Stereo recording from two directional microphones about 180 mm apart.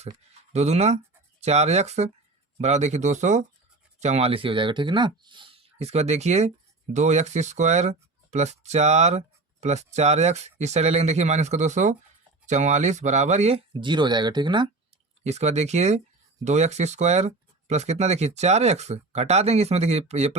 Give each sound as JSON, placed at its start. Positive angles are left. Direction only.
{"t": 0.5, "sound": "speech", "side_deg": -40}
{"t": 15.2, "sound": "speech", "side_deg": -40}